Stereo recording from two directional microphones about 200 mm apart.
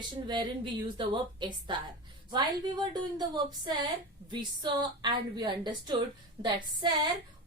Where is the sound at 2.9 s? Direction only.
20° right (ahead or behind).